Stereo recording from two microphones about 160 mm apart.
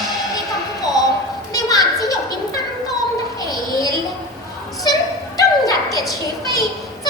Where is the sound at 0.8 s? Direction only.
25° left (ahead or behind).